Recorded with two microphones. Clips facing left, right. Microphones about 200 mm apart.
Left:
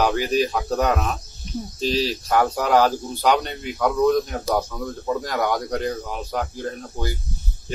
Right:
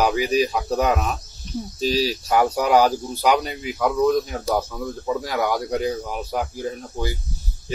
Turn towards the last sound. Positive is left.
turn(degrees=-5)  # may be behind; listen again after turning